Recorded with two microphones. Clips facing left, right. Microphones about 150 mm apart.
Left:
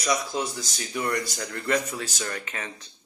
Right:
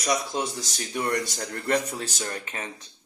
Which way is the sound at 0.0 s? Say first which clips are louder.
Even; 35° right (ahead or behind).